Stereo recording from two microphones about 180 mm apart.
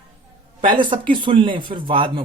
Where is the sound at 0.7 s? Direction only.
25° right (ahead or behind).